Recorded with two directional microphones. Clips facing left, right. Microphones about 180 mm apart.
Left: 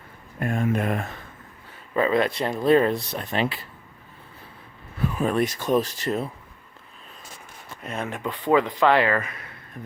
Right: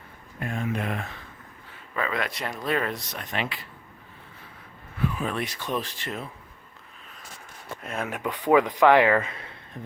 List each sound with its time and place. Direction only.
0.3 s speech: 50° left (ahead or behind)
1.9 s speech: 30° left (ahead or behind)
4.9 s speech: 45° left (ahead or behind)
7.8 s speech: 5° right (ahead or behind)
8.2 s speech: 15° right (ahead or behind)